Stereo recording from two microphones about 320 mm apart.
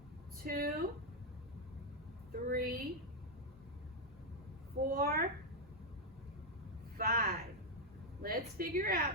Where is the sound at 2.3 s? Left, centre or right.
Right.